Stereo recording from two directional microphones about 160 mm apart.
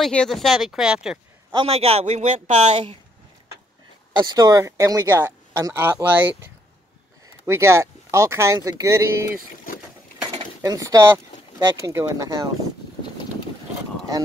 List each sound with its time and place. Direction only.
0.0 s speech: 5° left (ahead or behind)
1.5 s a man's voice: 35° right (ahead or behind)
4.2 s speech: 25° right (ahead or behind)